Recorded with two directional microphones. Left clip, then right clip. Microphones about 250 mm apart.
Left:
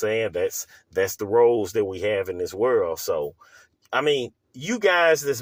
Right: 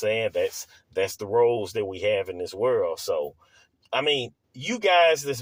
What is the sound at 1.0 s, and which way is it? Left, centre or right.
Speech, left.